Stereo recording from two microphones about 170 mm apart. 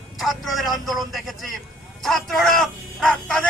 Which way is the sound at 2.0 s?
Centre (ahead or behind).